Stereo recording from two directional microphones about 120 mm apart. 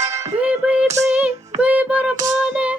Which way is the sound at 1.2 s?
10° right (ahead or behind).